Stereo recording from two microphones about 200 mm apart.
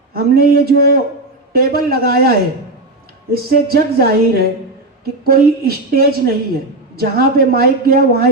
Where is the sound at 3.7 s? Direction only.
50° right (ahead or behind).